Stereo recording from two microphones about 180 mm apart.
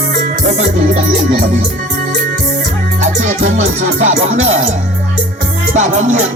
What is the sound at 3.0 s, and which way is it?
Music, 40° right (ahead or behind).